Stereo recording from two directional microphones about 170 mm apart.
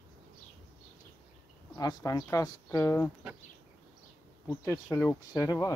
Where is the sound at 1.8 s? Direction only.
20° left (ahead or behind).